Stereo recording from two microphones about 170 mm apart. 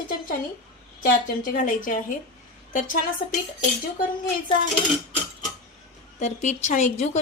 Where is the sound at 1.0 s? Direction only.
50° left (ahead or behind).